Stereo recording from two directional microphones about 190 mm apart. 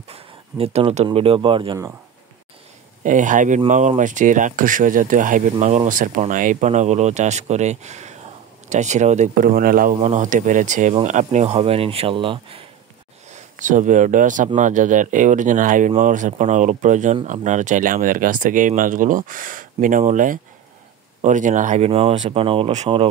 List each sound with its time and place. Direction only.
0.1 s speech: 30° right (ahead or behind)
3.0 s speech: 40° right (ahead or behind)
9.9 s speech: 35° right (ahead or behind)
13.3 s speech: 40° right (ahead or behind)